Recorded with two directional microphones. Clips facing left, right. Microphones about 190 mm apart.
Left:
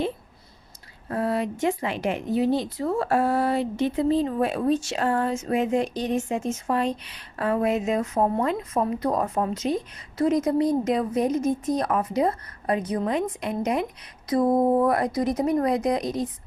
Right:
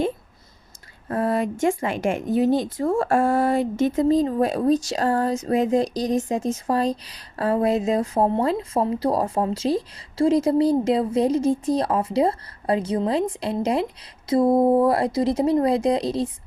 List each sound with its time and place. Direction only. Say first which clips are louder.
1.0 s speech: right 3 dB; 45° right (ahead or behind); by 16.3 s 30° right (ahead or behind)